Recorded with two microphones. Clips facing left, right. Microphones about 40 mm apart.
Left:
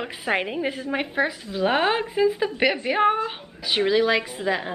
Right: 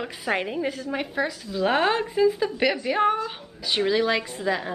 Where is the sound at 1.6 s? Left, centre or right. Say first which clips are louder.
Even; centre.